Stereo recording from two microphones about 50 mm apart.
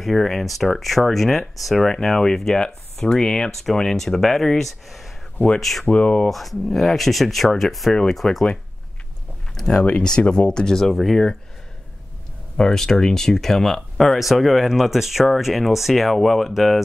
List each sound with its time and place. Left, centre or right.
0.0 s speech: centre
5.9 s speech: left
6.2 s speech: centre
9.7 s speech: left; by 11.3 s centre
12.5 s speech: centre